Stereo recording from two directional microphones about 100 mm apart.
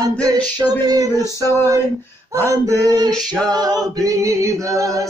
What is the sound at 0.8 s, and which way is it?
A capella, 40° right (ahead or behind).